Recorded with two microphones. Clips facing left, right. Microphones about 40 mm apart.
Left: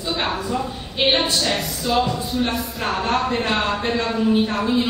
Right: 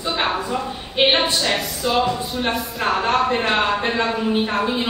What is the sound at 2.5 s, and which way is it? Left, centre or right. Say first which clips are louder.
Speech: right 2 dB; centre.